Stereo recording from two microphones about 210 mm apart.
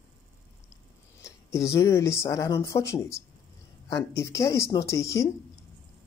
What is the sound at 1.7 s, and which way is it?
Speech, 15° left (ahead or behind).